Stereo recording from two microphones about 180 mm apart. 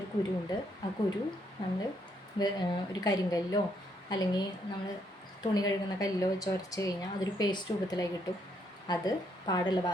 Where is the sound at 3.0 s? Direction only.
20° left (ahead or behind).